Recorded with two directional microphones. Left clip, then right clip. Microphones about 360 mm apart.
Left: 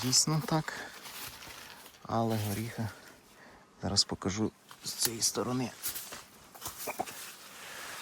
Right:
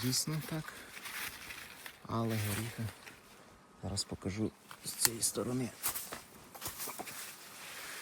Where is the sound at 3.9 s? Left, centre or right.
Left.